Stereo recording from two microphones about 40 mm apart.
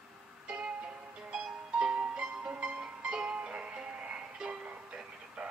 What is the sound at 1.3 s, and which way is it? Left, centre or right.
Music, right.